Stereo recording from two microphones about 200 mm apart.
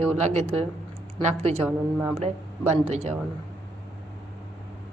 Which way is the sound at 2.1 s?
30° right (ahead or behind).